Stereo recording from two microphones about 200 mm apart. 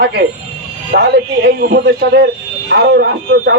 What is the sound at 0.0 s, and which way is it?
Speech, 50° right (ahead or behind).